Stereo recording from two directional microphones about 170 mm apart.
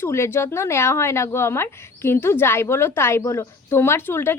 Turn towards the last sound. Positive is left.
turn(degrees=15)  # may be behind; listen again after turning